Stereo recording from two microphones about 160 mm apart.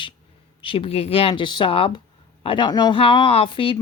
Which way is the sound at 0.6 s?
35° left (ahead or behind).